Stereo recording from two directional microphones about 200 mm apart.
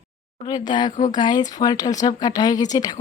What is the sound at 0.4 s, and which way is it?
A woman's voice, 20° left (ahead or behind).